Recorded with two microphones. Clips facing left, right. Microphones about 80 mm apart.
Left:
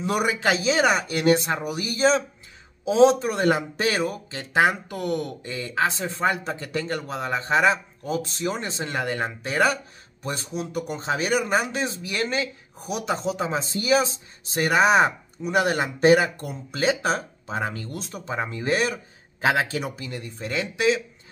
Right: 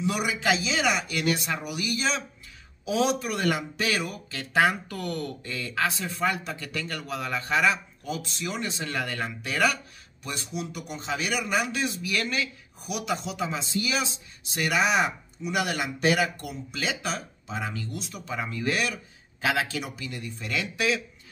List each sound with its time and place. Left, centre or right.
0.0 s a man's voice: left
18.2 s a man's voice: left